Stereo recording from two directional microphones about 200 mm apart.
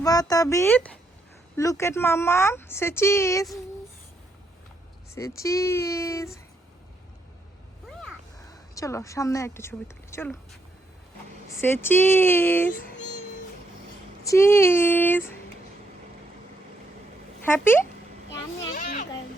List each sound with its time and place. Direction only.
0.0 s a woman's voice: 20° left (ahead or behind)
5.1 s a woman's voice: 15° left (ahead or behind)
8.7 s a woman's voice: 15° left (ahead or behind)
11.6 s a woman's voice: 10° left (ahead or behind)
14.3 s a woman's voice: 15° left (ahead or behind)
17.4 s speech: 10° left (ahead or behind)
18.7 s vehicle: 40° left (ahead or behind)